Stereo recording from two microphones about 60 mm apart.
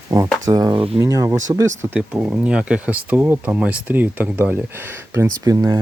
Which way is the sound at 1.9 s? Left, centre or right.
Right.